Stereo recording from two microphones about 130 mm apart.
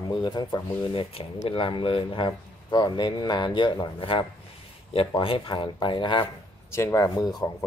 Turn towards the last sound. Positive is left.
turn(degrees=30)  # may be behind; listen again after turning